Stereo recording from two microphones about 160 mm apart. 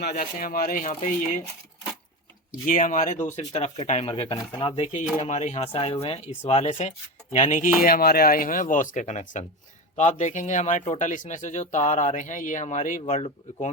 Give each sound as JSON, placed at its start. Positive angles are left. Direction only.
{"t": 0.0, "sound": "speech", "side_deg": 70}
{"t": 2.6, "sound": "speech", "side_deg": 55}
{"t": 4.7, "sound": "speech", "side_deg": 45}